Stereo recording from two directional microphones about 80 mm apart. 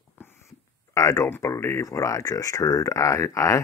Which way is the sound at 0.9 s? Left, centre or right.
Left.